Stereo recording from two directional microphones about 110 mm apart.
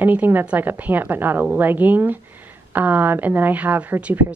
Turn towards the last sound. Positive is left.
turn(degrees=-15)  # may be behind; listen again after turning